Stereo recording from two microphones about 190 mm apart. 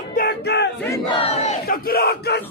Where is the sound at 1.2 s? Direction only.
35° left (ahead or behind).